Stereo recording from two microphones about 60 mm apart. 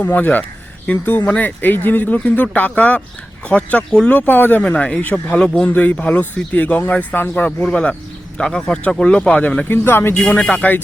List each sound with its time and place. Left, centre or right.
0.0 s speech: left
4.7 s speech: left
8.4 s speech: centre
9.6 s speech: left
10.2 s speech: left